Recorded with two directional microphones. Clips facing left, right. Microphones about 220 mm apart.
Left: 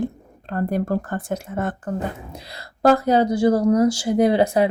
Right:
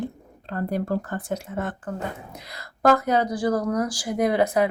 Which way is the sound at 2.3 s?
30° left (ahead or behind).